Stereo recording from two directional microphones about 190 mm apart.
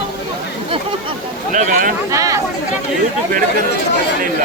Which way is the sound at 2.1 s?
15° right (ahead or behind).